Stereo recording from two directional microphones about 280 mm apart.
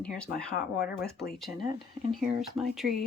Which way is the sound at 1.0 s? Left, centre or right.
Left.